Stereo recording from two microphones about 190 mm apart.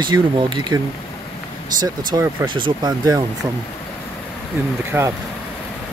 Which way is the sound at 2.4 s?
25° right (ahead or behind).